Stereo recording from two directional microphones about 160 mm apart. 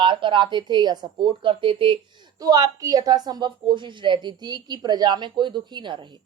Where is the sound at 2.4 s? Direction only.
20° right (ahead or behind).